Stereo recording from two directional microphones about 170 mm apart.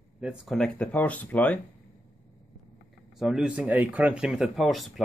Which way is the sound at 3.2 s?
5° right (ahead or behind).